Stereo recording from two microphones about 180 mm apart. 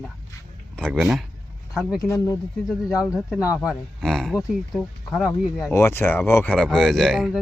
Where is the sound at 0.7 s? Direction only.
Centre (ahead or behind).